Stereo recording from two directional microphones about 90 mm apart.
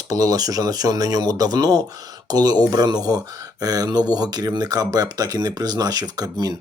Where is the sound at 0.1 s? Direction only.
45° right (ahead or behind).